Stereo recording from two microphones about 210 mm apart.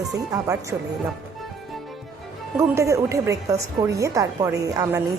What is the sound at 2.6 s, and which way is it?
A woman's voice, 15° right (ahead or behind).